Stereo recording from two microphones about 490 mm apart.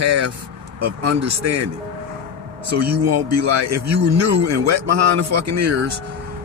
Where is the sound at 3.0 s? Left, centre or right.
Right.